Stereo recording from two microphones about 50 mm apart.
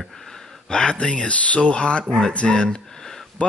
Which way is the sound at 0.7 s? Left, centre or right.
Centre.